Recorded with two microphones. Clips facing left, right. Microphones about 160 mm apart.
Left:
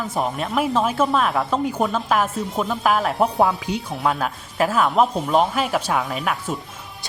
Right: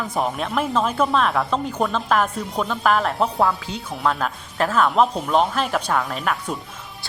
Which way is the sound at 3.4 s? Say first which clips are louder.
Left 2 dB; 20° left (ahead or behind).